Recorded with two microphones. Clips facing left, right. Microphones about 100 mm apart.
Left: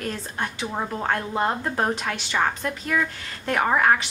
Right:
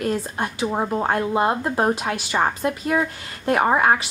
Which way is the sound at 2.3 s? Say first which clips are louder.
Right 3 dB; 25° right (ahead or behind).